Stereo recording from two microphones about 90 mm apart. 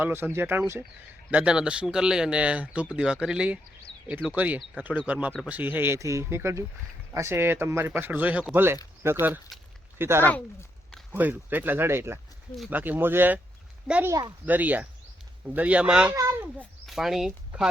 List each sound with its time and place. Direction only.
0.0 s speech: 25° right (ahead or behind)
14.1 s speech: 45° right (ahead or behind)
14.4 s speech: 20° right (ahead or behind)